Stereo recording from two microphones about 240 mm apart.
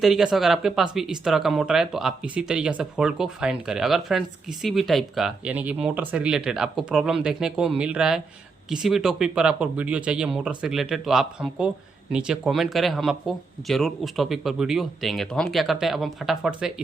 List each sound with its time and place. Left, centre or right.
0.0 s speech: centre